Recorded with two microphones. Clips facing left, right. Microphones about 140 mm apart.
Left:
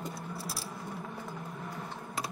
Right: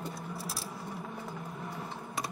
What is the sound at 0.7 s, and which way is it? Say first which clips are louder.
Coin: even; 5° right (ahead or behind).